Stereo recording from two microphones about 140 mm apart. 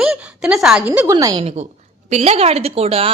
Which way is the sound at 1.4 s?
45° right (ahead or behind).